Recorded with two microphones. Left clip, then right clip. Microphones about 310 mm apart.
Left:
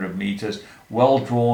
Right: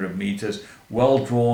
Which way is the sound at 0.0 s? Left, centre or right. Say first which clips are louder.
Even; centre.